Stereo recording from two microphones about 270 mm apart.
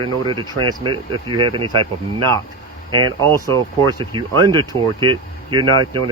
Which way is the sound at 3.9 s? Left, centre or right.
Centre.